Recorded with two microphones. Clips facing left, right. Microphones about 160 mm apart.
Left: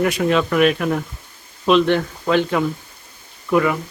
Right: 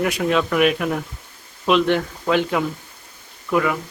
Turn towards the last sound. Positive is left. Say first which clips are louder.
# left 3 dB
turn(degrees=0)  # may be behind; listen again after turning